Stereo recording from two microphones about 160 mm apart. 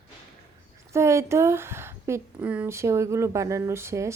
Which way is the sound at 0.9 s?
15° right (ahead or behind).